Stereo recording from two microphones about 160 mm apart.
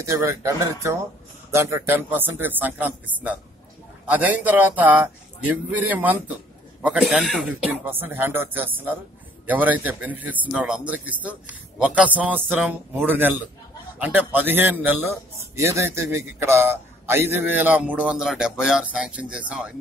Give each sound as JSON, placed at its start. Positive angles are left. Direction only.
{"t": 0.0, "sound": "a man's voice", "side_deg": -15}
{"t": 7.8, "sound": "a man's voice", "side_deg": -10}